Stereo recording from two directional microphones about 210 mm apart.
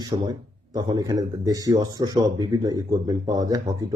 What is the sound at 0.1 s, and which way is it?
Speech, 25° right (ahead or behind).